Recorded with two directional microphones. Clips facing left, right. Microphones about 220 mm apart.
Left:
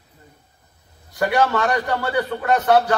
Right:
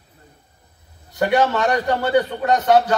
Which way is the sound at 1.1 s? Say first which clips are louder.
Right 1 dB; 20° right (ahead or behind).